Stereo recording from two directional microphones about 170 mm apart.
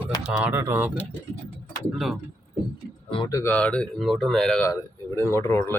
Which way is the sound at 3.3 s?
20° left (ahead or behind).